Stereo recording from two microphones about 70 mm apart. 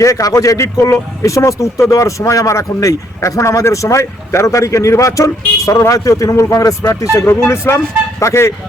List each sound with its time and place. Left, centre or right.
0.0 s speech: left
7.3 s speech: left